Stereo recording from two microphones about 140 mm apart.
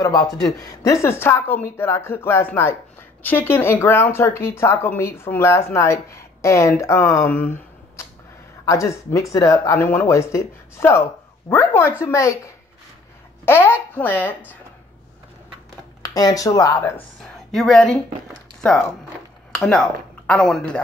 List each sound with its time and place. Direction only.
0.0 s speech: 25° left (ahead or behind)
7.3 s a sound: 15° left (ahead or behind)
8.6 s speech: 20° left (ahead or behind)
13.5 s speech: 15° left (ahead or behind)
16.0 s speech: 25° left (ahead or behind)
17.2 s speech: centre (ahead or behind)
19.5 s speech: centre (ahead or behind)